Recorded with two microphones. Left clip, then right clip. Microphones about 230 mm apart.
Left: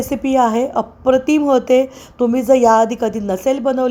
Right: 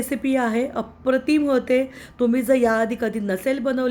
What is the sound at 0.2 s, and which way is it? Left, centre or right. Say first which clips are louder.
Speech: left 8 dB; right.